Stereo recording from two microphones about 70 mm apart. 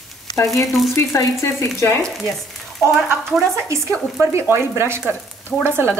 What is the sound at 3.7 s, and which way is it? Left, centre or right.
Speech, right.